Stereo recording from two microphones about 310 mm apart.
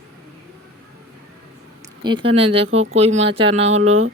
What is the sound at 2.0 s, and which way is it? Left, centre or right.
Speech, centre.